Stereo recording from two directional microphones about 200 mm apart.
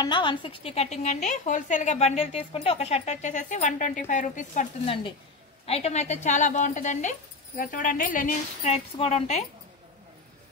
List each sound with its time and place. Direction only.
0.0 s a woman's voice: 25° left (ahead or behind); by 8.7 s 40° left (ahead or behind)
8.7 s a woman's voice: 30° left (ahead or behind)